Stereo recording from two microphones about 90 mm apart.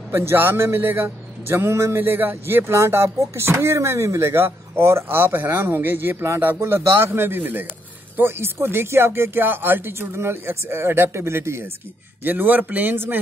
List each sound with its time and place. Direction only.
0.1 s a man's voice: 30° right (ahead or behind)